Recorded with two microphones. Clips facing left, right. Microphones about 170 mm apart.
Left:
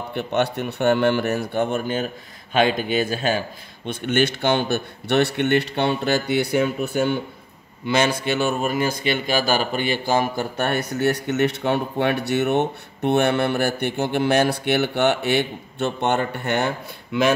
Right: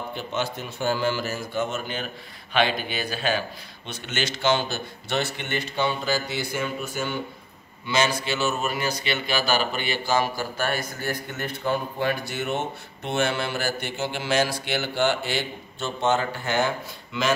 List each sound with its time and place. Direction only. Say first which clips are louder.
0.1 s speech: left 9 dB; 65° left (ahead or behind)